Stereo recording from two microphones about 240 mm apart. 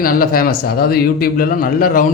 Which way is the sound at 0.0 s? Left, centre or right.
Left.